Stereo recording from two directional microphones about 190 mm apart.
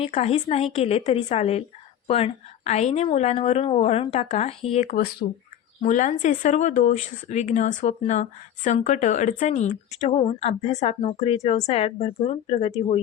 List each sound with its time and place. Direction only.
0.0 s speech: 30° left (ahead or behind)
5.2 s speech: 60° left (ahead or behind)
5.8 s speech: 40° left (ahead or behind)